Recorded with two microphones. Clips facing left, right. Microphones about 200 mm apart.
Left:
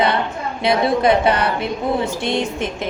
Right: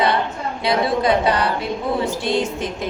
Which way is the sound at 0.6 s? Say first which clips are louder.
Left 3 dB; 25° left (ahead or behind).